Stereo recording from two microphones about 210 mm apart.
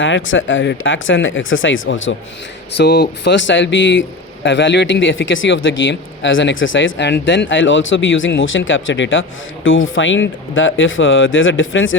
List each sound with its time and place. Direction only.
0.0 s speech: 65° left (ahead or behind)
2.7 s speech: 50° left (ahead or behind); by 11.9 s 70° left (ahead or behind)